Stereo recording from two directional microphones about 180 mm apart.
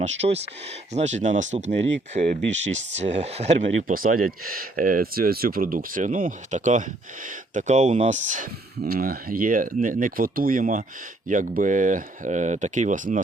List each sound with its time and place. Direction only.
0.0 s speech: 35° right (ahead or behind)
8.8 s speech: 55° right (ahead or behind)